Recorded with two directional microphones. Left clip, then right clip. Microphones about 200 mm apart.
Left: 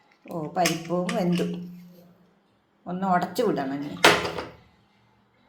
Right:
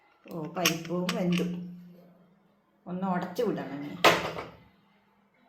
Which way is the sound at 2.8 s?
15° left (ahead or behind).